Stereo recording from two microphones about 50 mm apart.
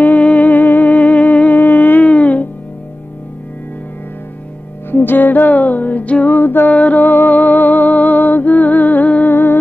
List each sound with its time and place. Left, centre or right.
0.0 s music: left
4.9 s music: left
6.3 s music: left
9.3 s music: left